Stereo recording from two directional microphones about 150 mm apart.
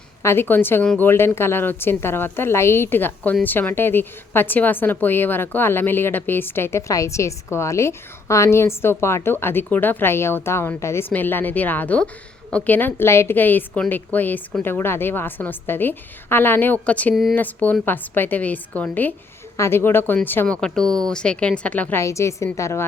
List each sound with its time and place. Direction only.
0.2 s a woman's voice: 15° left (ahead or behind)